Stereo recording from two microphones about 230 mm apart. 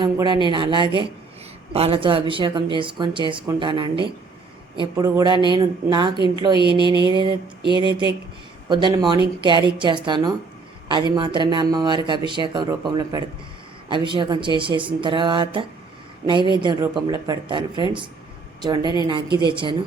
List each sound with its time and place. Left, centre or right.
0.0 s a woman's voice: centre